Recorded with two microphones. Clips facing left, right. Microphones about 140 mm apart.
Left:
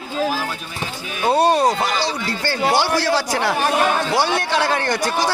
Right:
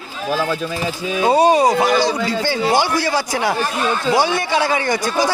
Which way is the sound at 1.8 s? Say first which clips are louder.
Right 6 dB; 45° right (ahead or behind).